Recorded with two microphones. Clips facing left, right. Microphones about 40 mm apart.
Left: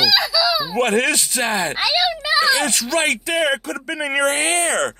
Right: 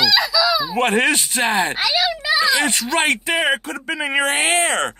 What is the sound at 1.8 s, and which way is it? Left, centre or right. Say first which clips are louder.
Speech: even; centre.